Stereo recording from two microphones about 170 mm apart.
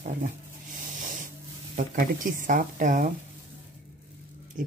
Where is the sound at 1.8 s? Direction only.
50° right (ahead or behind).